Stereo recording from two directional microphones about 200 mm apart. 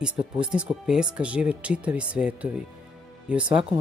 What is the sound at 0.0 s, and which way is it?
Speech, 5° right (ahead or behind).